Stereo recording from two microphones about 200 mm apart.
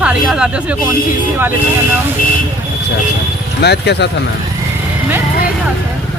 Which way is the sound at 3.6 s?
55° left (ahead or behind).